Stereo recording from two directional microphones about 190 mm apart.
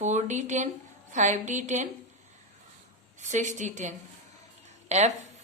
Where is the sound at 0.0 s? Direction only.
40° right (ahead or behind).